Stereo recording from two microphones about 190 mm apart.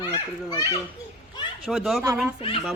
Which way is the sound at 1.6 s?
Centre (ahead or behind).